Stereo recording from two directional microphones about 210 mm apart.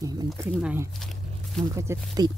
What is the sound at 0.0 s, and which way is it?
Speech, 15° right (ahead or behind).